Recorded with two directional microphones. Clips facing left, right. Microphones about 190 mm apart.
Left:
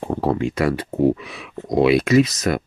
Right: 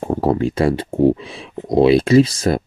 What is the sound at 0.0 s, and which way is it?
Speech, 40° right (ahead or behind).